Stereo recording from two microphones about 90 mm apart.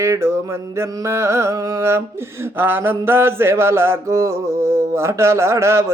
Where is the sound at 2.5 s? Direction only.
25° right (ahead or behind).